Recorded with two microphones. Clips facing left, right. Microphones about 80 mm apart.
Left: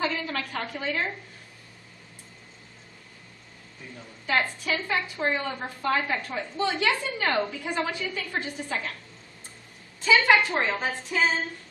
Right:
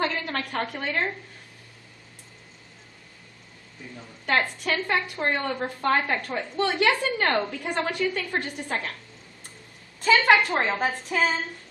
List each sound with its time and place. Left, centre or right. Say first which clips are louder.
0.0 s a woman's voice: right 1 dB; right
4.3 s a woman's voice: right 2 dB; right
10.0 s a woman's voice: right 1 dB; right